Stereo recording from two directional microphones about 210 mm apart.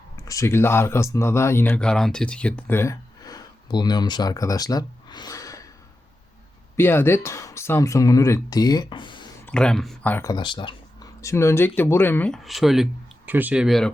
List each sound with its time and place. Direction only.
0.3 s speech: 15° left (ahead or behind)
6.7 s speech: 10° left (ahead or behind)
9.5 s speech: 5° left (ahead or behind)
10.3 s speech: 25° left (ahead or behind); by 13.9 s centre (ahead or behind)